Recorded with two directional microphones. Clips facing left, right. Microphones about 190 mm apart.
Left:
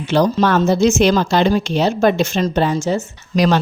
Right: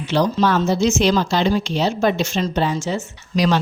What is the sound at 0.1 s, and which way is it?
Speech, 50° left (ahead or behind).